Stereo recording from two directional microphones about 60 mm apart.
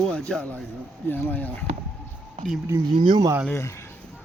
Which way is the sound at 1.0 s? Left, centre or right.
Left.